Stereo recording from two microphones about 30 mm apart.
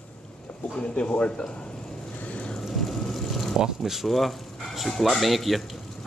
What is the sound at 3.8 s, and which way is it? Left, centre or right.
Speech, centre.